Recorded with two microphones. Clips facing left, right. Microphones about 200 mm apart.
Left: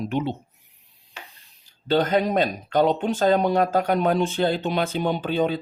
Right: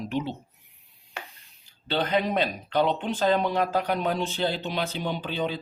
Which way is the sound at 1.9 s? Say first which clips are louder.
Left 5 dB; 45° left (ahead or behind).